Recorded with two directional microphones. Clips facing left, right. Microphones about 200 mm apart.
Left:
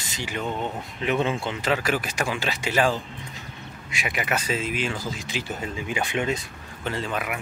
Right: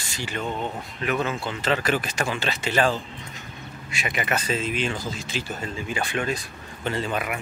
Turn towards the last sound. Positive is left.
turn(degrees=0)  # may be behind; listen again after turning